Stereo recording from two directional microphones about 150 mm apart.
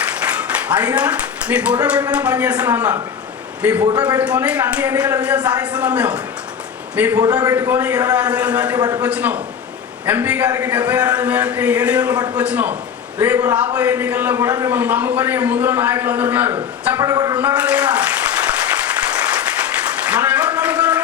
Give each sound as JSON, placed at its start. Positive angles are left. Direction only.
{"t": 0.2, "sound": "clapping", "side_deg": -10}
{"t": 2.1, "sound": "a man's voice", "side_deg": -10}
{"t": 7.3, "sound": "a man's voice", "side_deg": -25}
{"t": 12.1, "sound": "a man's voice", "side_deg": -25}
{"t": 12.4, "sound": "a man's voice", "side_deg": -10}
{"t": 14.8, "sound": "a man's voice", "side_deg": -10}
{"t": 17.0, "sound": "a man's voice", "side_deg": -25}
{"t": 17.3, "sound": "applause", "side_deg": -10}
{"t": 20.1, "sound": "a sound", "side_deg": -10}